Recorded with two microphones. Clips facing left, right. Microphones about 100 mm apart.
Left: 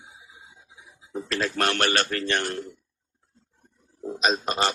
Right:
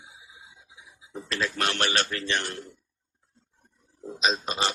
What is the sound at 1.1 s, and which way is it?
A man's voice, 40° left (ahead or behind).